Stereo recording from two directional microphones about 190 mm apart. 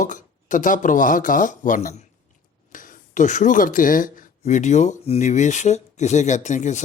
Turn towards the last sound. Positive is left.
turn(degrees=40)  # may be behind; listen again after turning